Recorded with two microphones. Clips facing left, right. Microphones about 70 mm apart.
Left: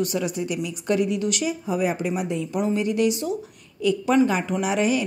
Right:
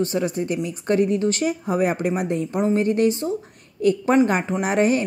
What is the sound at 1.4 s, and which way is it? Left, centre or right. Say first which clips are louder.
Speech: right 3 dB; right.